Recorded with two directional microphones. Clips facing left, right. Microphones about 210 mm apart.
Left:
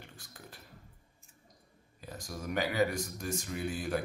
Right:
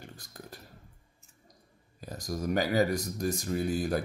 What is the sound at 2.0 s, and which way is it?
Speech, 40° right (ahead or behind).